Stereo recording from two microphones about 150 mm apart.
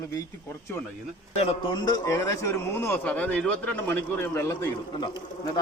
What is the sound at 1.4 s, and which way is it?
A man's voice, 35° left (ahead or behind).